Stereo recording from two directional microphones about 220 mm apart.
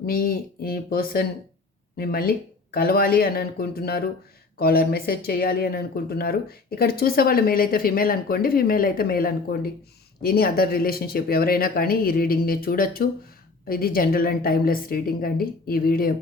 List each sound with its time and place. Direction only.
0.0 s a woman's voice: 45° left (ahead or behind)